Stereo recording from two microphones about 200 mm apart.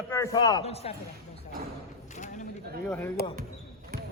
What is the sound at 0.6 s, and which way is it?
Speech, 30° left (ahead or behind).